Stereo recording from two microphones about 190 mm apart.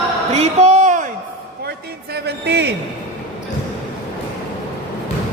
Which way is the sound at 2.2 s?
60° right (ahead or behind).